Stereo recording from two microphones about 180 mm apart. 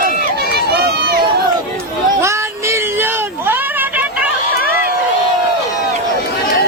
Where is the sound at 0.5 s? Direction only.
60° right (ahead or behind).